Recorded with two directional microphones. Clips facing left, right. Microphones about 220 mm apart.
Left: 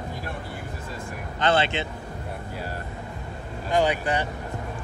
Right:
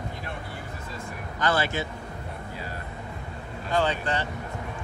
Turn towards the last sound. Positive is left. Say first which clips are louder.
# left 3 dB
turn(degrees=15)  # may be behind; listen again after turning